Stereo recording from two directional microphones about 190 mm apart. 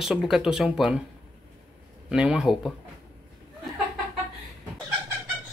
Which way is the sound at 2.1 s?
5° right (ahead or behind).